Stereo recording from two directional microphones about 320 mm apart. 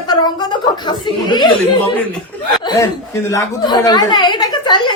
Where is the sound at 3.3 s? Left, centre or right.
Centre.